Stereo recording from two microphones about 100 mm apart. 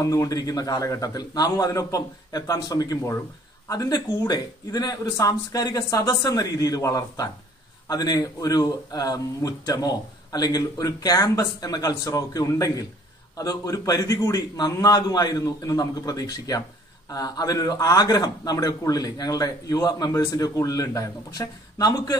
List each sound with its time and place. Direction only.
0.0 s a man's voice: 35° left (ahead or behind)